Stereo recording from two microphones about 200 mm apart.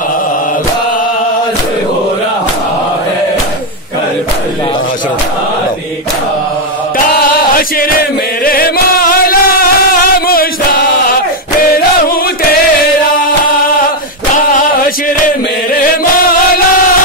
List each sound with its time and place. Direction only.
7.3 s chant: 45° left (ahead or behind)
8.5 s music: 45° left (ahead or behind)
10.2 s choir: 50° left (ahead or behind)
14.5 s a sound: 45° left (ahead or behind)